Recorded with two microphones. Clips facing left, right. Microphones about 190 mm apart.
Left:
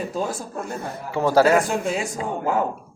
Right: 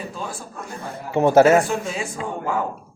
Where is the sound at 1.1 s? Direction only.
20° right (ahead or behind).